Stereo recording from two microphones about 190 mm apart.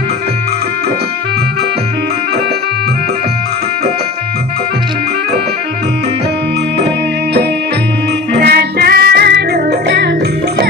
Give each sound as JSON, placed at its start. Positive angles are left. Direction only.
{"t": 8.4, "sound": "music", "side_deg": -55}